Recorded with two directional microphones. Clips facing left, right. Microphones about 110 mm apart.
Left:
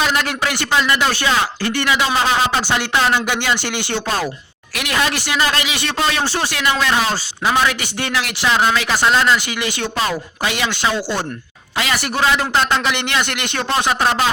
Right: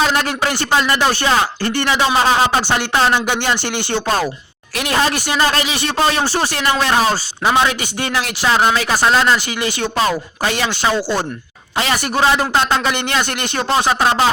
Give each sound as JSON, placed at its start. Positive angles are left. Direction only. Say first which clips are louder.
{"t": 0.0, "sound": "speech", "louder": "right 2 dB", "side_deg": -35}
{"t": 4.7, "sound": "speech", "louder": "right 3 dB", "side_deg": -30}
{"t": 7.4, "sound": "a man's voice", "louder": "right 2 dB", "side_deg": -25}